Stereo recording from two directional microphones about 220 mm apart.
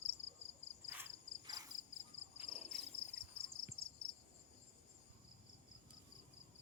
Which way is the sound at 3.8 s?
20° left (ahead or behind).